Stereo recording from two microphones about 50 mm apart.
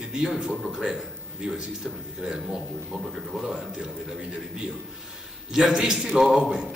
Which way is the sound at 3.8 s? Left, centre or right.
Centre.